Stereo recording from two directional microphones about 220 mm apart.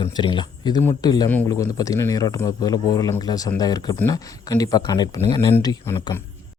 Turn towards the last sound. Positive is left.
turn(degrees=10)  # may be behind; listen again after turning